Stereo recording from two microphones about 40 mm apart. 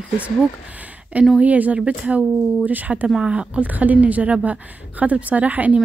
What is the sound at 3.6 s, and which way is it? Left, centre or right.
A woman's voice, right.